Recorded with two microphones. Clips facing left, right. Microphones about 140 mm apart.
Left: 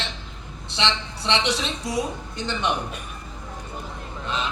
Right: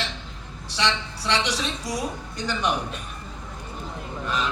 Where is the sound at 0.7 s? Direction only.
25° left (ahead or behind).